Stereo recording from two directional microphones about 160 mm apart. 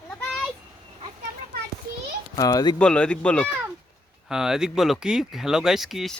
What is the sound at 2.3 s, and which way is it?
Speech, 25° left (ahead or behind).